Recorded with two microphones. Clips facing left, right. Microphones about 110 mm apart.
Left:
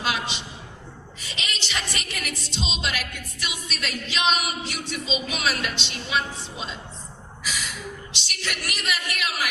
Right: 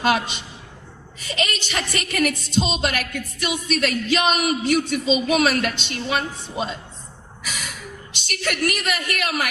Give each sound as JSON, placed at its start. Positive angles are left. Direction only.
{"t": 0.0, "sound": "music", "side_deg": -50}
{"t": 7.4, "sound": "gasp", "side_deg": -50}
{"t": 8.1, "sound": "music", "side_deg": -50}